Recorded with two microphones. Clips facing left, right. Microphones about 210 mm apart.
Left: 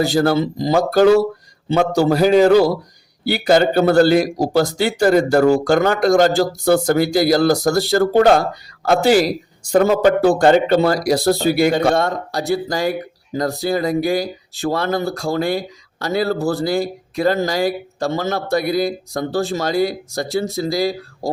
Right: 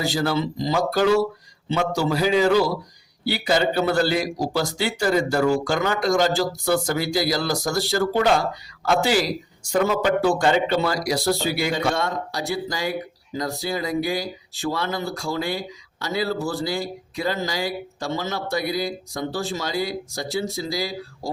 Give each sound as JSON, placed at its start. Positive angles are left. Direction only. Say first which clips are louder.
{"t": 0.0, "sound": "speech", "louder": "left 7 dB", "side_deg": 55}